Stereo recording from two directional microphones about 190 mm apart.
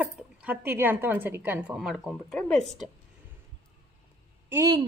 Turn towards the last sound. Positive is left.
turn(degrees=-15)  # may be behind; listen again after turning